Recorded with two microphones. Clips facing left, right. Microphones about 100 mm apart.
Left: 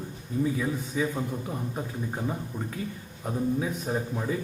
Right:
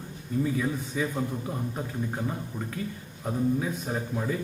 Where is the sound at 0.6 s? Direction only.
5° left (ahead or behind).